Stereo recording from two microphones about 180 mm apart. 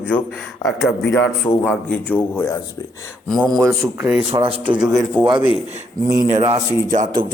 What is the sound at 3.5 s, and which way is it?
Speech, 15° right (ahead or behind).